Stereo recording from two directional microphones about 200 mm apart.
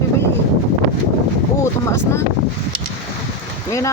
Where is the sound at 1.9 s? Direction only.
15° left (ahead or behind).